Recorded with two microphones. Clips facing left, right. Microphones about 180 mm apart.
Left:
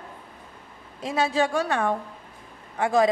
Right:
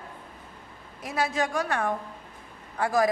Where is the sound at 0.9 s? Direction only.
25° left (ahead or behind).